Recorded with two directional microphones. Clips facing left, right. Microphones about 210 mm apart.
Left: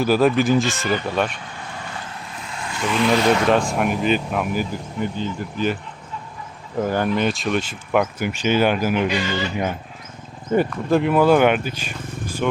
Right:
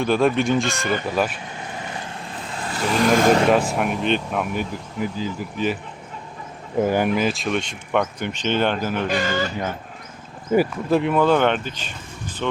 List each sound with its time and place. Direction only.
0.0 s speech: 5° left (ahead or behind)
2.3 s vehicle: 35° right (ahead or behind)
3.7 s speech: centre (ahead or behind)
6.8 s speech: 10° right (ahead or behind); by 9.0 s 10° left (ahead or behind)
9.0 s speech: 50° right (ahead or behind)
10.5 s speech: 5° right (ahead or behind)